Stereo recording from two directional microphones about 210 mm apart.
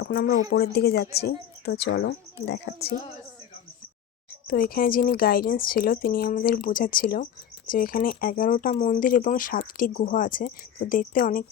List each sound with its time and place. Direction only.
0.0 s a woman's voice: 50° left (ahead or behind)
4.4 s a woman's voice: 45° left (ahead or behind)